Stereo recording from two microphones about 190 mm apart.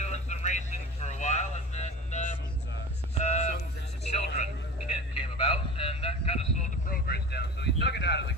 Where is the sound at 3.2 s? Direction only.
35° left (ahead or behind).